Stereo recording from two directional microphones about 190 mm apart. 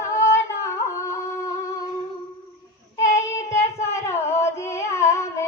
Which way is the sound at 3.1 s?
15° left (ahead or behind).